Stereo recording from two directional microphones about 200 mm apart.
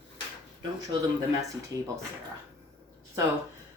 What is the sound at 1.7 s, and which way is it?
Speech, 15° left (ahead or behind).